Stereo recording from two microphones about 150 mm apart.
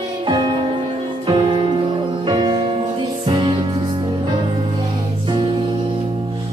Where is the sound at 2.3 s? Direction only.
30° right (ahead or behind).